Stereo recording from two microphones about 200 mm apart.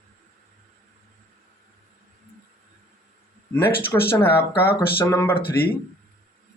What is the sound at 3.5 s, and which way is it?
Speech, 10° left (ahead or behind).